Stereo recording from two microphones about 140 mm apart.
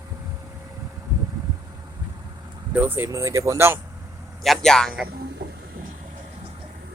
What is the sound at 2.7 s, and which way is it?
Speech, 15° right (ahead or behind).